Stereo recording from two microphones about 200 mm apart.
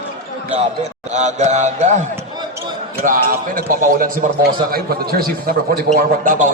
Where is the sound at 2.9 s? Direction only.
45° right (ahead or behind).